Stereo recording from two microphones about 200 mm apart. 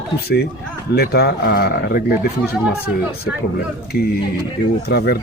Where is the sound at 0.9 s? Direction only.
55° left (ahead or behind).